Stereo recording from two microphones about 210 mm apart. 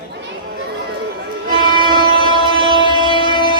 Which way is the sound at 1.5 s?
20° right (ahead or behind).